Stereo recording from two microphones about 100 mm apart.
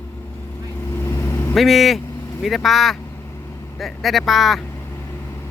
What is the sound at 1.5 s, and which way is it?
Speech, centre (ahead or behind).